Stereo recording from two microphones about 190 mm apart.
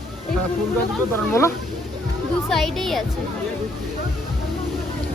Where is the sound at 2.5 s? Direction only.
Centre (ahead or behind).